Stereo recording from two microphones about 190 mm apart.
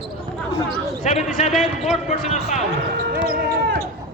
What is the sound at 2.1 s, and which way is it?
Speech, 40° left (ahead or behind).